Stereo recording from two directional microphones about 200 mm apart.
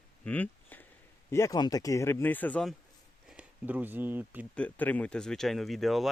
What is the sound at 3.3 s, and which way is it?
Speech, 5° right (ahead or behind).